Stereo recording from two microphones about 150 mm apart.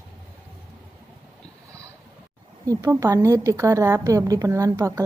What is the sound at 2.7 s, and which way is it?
A woman's voice, 20° right (ahead or behind).